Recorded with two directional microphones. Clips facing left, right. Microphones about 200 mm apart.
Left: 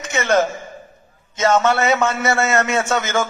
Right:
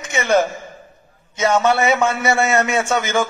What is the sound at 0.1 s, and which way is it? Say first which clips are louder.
A man's voice: right 1 dB; 15° right (ahead or behind).